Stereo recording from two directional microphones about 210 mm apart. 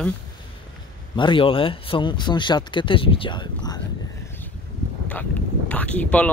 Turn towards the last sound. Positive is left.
turn(degrees=5)  # may be behind; listen again after turning